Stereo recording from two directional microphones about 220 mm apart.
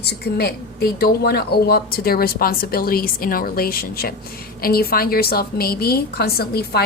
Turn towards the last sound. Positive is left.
turn(degrees=45)  # may be behind; listen again after turning